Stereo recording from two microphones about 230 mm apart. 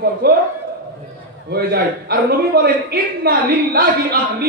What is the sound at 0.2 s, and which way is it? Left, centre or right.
Speech, right.